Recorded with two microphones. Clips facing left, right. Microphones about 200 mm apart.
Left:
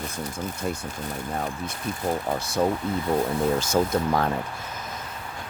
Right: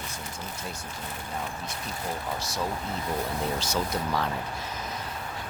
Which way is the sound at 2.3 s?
55° left (ahead or behind).